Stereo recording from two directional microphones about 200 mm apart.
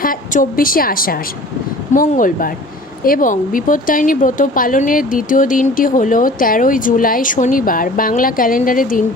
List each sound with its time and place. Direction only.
0.0 s speech: 45° left (ahead or behind)